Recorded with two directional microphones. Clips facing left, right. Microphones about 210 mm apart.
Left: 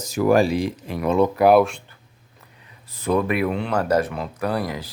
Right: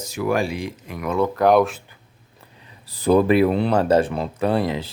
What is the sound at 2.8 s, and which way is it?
Speech, 35° right (ahead or behind).